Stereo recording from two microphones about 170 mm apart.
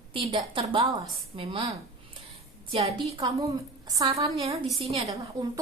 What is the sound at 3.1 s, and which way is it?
A woman's voice, 30° right (ahead or behind).